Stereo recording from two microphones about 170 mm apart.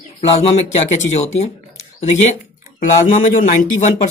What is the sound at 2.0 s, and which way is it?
Speech, 45° left (ahead or behind).